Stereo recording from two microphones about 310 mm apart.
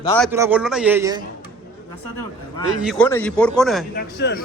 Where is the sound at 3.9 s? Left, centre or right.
Left.